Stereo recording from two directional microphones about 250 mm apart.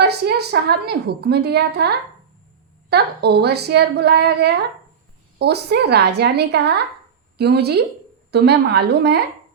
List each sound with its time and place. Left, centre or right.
0.0 s a woman's voice: right